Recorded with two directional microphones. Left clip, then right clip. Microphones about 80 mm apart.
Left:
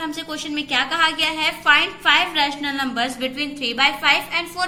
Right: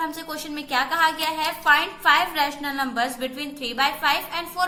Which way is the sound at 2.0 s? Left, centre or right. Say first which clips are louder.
Left 2 dB; right.